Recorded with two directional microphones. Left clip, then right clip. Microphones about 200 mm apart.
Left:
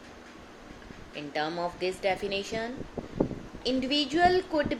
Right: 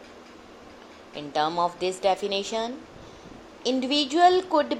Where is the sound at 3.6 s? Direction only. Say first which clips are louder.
Right 3 dB; 20° right (ahead or behind).